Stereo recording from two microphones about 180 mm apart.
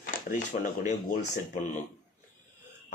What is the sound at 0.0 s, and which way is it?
Speech, 50° left (ahead or behind).